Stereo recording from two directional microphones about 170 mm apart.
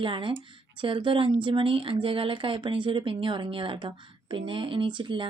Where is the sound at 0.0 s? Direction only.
30° right (ahead or behind).